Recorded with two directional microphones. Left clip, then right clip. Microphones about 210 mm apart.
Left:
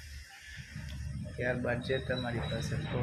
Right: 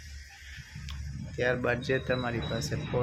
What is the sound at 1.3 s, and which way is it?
Speech, 45° right (ahead or behind).